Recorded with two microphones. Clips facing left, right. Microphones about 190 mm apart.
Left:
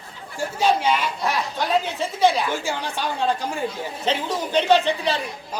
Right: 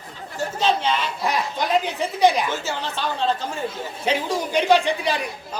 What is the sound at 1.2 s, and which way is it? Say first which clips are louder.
A woman's voice: right 1 dB; 15° right (ahead or behind).